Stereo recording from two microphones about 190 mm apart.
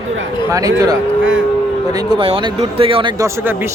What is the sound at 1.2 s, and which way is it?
Speech, 80° right.